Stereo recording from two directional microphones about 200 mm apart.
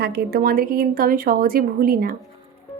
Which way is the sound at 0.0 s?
50° right (ahead or behind).